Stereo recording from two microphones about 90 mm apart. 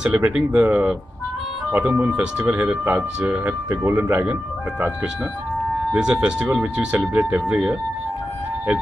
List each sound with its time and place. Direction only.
0.1 s speech: 15° right (ahead or behind)